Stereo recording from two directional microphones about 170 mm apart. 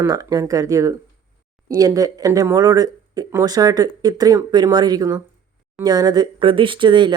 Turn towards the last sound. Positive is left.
turn(degrees=-25)  # may be behind; listen again after turning